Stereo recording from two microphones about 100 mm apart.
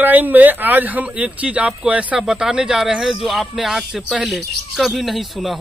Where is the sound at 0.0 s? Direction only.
15° right (ahead or behind).